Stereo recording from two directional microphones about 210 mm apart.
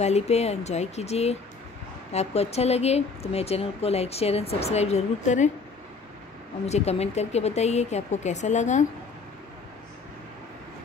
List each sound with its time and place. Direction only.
0.0 s speech: 30° left (ahead or behind)
6.6 s speech: 30° left (ahead or behind)